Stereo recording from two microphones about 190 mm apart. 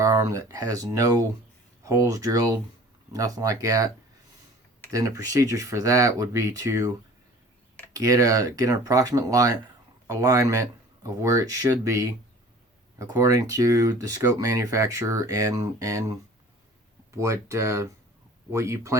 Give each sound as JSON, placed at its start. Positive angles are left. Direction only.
{"t": 0.0, "sound": "speech", "side_deg": -15}
{"t": 7.9, "sound": "speech", "side_deg": -20}